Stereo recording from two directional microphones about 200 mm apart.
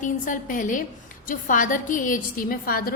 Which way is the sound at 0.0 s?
40° left (ahead or behind).